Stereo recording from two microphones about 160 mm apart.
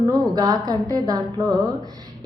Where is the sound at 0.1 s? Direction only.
25° right (ahead or behind).